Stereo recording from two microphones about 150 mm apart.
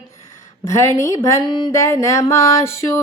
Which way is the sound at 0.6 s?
20° left (ahead or behind).